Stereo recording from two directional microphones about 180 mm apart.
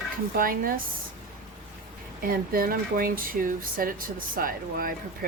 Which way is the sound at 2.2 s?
55° right (ahead or behind).